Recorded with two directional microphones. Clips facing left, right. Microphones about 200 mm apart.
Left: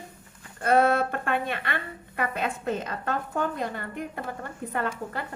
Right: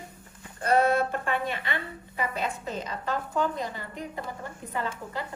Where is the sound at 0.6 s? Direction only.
55° left (ahead or behind).